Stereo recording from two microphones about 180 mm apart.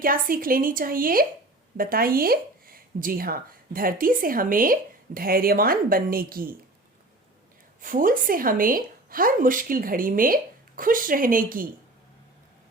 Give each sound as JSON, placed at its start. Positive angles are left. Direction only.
{"t": 0.0, "sound": "speech", "side_deg": -50}
{"t": 7.8, "sound": "speech", "side_deg": -50}